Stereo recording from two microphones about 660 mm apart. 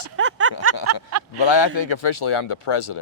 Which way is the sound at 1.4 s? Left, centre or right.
Left.